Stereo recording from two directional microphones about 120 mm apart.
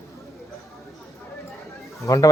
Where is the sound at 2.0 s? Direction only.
30° left (ahead or behind).